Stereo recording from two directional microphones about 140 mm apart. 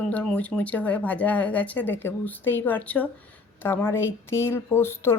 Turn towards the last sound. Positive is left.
turn(degrees=15)  # may be behind; listen again after turning